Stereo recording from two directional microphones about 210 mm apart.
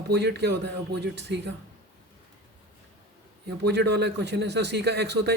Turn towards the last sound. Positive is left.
turn(degrees=-50)  # may be behind; listen again after turning